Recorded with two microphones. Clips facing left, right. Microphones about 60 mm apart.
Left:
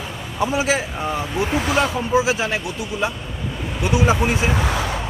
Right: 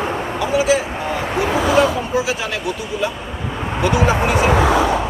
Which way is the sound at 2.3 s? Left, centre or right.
Left.